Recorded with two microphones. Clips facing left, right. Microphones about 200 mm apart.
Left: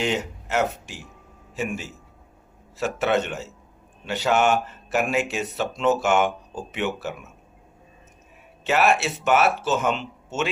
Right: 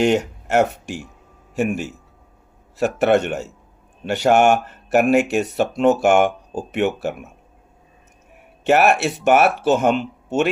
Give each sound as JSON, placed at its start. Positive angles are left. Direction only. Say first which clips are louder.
{"t": 0.4, "sound": "speech", "louder": "right 5 dB", "side_deg": -60}
{"t": 8.6, "sound": "speech", "louder": "right 5 dB", "side_deg": -60}